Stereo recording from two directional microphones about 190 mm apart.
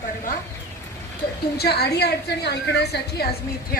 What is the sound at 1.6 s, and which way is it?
A woman's voice, 55° left (ahead or behind).